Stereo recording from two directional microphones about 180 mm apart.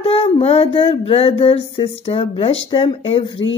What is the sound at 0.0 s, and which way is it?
Speech, 30° left (ahead or behind).